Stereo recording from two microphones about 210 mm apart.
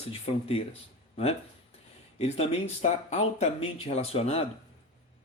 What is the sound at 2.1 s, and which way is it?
Speech, 30° left (ahead or behind).